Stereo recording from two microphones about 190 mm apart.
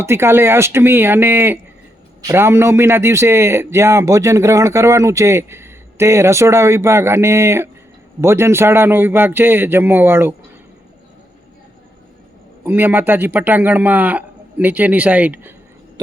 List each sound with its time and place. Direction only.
0.0 s speech: 15° right (ahead or behind)
12.6 s speech: 10° right (ahead or behind)